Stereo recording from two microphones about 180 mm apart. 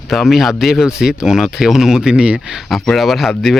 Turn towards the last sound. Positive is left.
turn(degrees=0)  # may be behind; listen again after turning